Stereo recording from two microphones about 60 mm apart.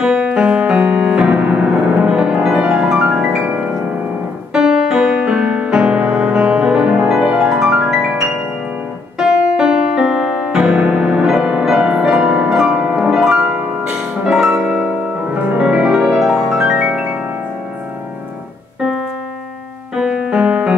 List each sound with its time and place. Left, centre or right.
0.0 s music: centre
4.6 s music: centre
13.4 s harp: right
13.8 s music: centre
15.3 s music: right
16.0 s music: centre
20.0 s music: centre